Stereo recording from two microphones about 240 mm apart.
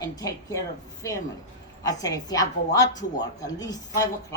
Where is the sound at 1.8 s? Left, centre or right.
Centre.